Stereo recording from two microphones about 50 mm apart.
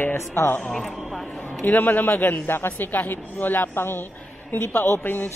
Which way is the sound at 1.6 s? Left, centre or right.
Left.